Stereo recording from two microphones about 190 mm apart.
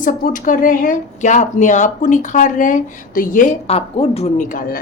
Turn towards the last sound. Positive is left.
turn(degrees=45)  # may be behind; listen again after turning